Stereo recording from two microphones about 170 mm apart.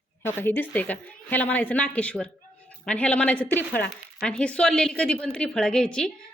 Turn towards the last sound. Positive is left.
turn(degrees=5)  # may be behind; listen again after turning